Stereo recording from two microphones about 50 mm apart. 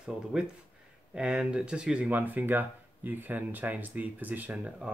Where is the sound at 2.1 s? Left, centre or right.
Right.